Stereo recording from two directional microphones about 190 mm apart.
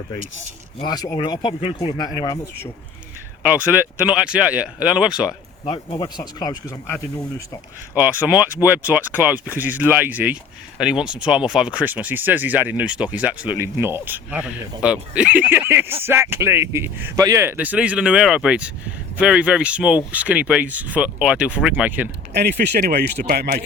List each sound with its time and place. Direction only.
0.8 s speech: 20° left (ahead or behind)
3.4 s speech: 10° right (ahead or behind)
5.6 s speech: 25° left (ahead or behind)
7.9 s speech: 10° right (ahead or behind)
22.3 s speech: 60° right (ahead or behind)